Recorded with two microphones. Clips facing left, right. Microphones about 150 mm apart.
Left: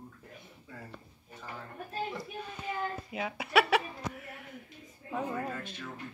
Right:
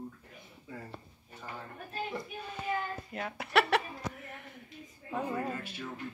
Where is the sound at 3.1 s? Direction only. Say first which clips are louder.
Left 1 dB; 5° left (ahead or behind).